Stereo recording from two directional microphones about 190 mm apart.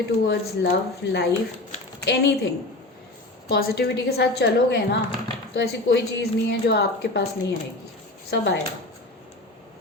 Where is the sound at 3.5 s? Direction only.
55° left (ahead or behind).